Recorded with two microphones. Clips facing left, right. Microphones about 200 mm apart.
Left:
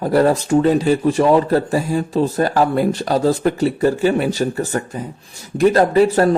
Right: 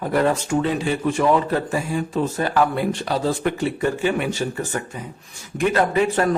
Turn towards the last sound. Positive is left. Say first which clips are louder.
# left 6 dB
turn(degrees=35)  # may be behind; listen again after turning